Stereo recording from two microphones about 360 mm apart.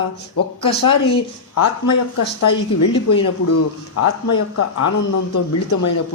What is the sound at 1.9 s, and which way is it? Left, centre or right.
Speech, left.